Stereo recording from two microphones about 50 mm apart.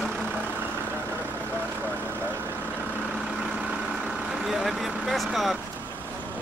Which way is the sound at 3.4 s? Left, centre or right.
Centre.